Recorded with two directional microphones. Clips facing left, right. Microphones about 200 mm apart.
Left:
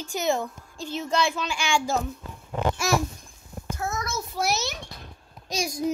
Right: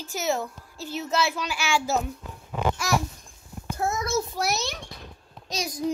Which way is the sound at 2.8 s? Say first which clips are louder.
Left 2 dB; 25° left (ahead or behind).